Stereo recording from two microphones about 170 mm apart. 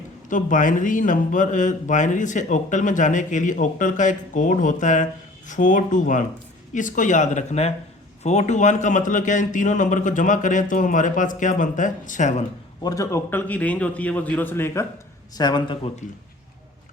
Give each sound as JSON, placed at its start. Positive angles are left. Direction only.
{"t": 0.3, "sound": "speech", "side_deg": 50}
{"t": 12.8, "sound": "a man's voice", "side_deg": 20}
{"t": 15.4, "sound": "speech", "side_deg": 25}